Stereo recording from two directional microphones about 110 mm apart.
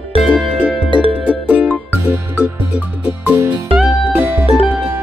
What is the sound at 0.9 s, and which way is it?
Music, 50° right (ahead or behind).